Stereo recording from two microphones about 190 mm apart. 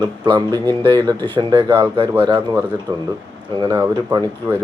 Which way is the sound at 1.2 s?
25° right (ahead or behind).